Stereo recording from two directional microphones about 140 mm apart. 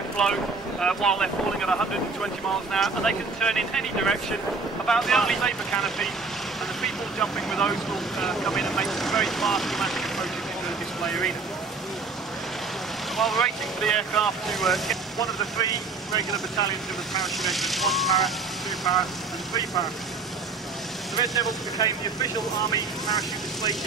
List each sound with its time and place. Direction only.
0.2 s speech: 5° left (ahead or behind)
13.2 s speech: centre (ahead or behind)
15.5 s speech: 25° left (ahead or behind)
17.1 s speech: centre (ahead or behind)
21.7 s speech: 25° left (ahead or behind)